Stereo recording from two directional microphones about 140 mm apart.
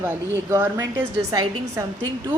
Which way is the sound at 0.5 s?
20° right (ahead or behind).